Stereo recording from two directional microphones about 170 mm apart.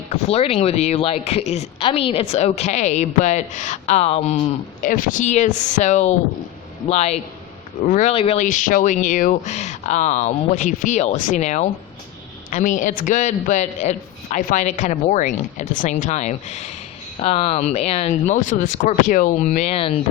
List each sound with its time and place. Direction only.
0.1 s a woman's voice: 35° left (ahead or behind)
4.8 s a man's voice: 55° left (ahead or behind)
7.9 s a man's voice: 50° left (ahead or behind)
8.1 s a man's voice: 35° left (ahead or behind)